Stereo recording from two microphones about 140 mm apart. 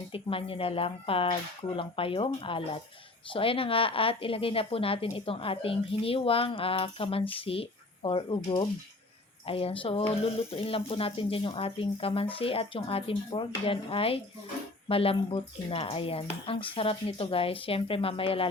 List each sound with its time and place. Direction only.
0.1 s speech: 40° left (ahead or behind)